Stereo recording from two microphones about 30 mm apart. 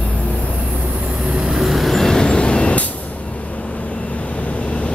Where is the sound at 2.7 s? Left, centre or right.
Left.